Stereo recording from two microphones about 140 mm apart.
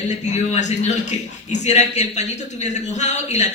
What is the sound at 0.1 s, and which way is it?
Speech, 55° left (ahead or behind).